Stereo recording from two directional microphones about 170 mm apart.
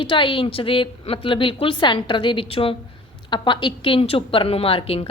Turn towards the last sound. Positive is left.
turn(degrees=35)  # may be behind; listen again after turning